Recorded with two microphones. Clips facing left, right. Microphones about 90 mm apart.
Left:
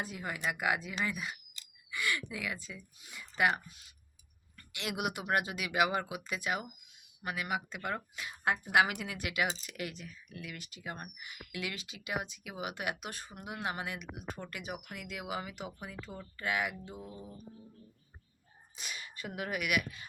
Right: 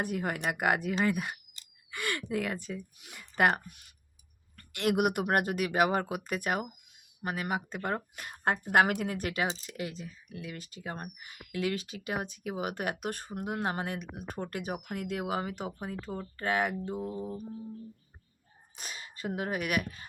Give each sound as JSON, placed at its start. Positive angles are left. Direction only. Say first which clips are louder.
{"t": 0.0, "sound": "speech", "louder": "right 5 dB", "side_deg": -55}
{"t": 9.5, "sound": "speech", "louder": "right 3 dB", "side_deg": -25}
{"t": 18.8, "sound": "speech", "louder": "right 4 dB", "side_deg": -35}